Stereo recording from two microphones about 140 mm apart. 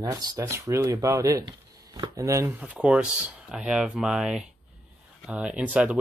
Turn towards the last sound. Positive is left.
turn(degrees=-10)  # may be behind; listen again after turning